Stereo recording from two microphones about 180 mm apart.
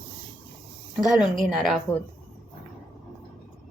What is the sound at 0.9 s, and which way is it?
A woman's voice, centre (ahead or behind).